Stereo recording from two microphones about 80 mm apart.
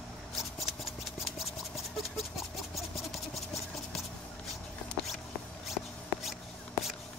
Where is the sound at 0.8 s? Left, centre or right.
Centre.